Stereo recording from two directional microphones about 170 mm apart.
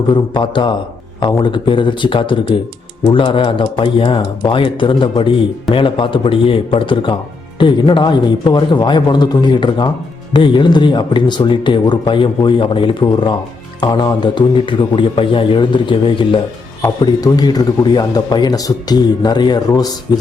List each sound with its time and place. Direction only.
0.1 s a man's voice: 25° left (ahead or behind)